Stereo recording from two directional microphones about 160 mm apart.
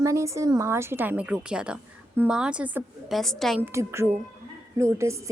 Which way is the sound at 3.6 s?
15° right (ahead or behind).